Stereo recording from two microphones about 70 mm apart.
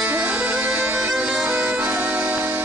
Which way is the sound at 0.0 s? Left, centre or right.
Right.